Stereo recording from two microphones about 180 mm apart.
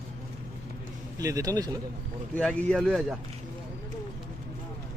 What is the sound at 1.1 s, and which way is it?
Speech, 20° right (ahead or behind).